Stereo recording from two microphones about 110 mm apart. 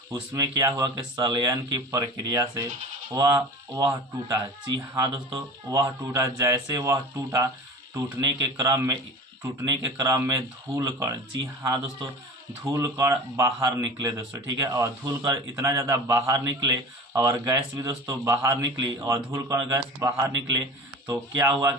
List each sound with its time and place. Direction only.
0.1 s a man's voice: 35° right (ahead or behind)